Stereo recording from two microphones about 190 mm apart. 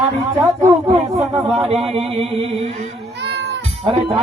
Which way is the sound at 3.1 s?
65° right (ahead or behind).